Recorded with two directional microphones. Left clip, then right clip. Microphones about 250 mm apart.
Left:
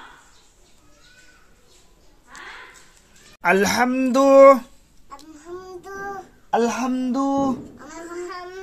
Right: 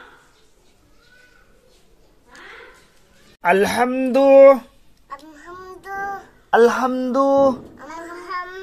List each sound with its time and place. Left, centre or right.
3.3 s speech: centre
6.5 s a sound: centre
8.3 s child singing: right